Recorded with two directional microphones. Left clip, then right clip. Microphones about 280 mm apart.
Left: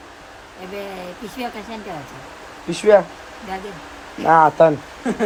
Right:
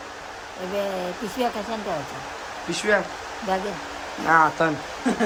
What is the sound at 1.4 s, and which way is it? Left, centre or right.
Speech, centre.